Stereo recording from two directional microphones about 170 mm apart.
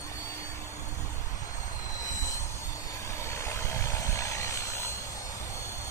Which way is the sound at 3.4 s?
20° left (ahead or behind).